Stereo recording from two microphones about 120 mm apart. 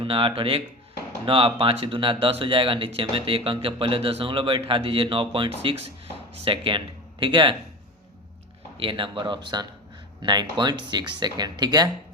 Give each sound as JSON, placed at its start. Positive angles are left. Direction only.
{"t": 0.0, "sound": "speech", "side_deg": -45}
{"t": 8.8, "sound": "speech", "side_deg": -45}